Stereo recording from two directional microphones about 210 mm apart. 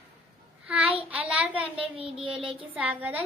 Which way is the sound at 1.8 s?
25° right (ahead or behind).